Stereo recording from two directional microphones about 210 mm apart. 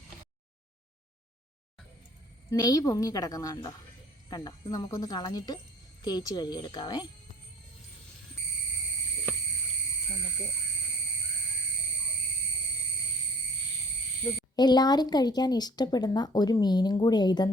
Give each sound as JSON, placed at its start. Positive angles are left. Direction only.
{"t": 2.5, "sound": "speech", "side_deg": 15}
{"t": 14.5, "sound": "speech", "side_deg": 20}